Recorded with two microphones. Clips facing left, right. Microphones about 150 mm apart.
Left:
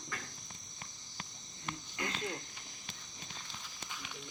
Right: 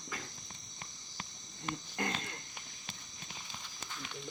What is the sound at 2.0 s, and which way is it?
Speech, 45° right (ahead or behind).